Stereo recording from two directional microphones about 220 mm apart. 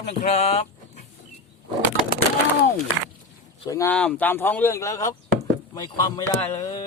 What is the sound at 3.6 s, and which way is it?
Speech, 15° left (ahead or behind).